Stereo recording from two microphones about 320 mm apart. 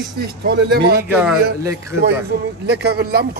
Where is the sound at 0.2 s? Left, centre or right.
Right.